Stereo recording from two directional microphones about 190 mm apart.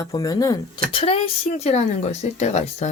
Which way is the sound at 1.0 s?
30° left (ahead or behind).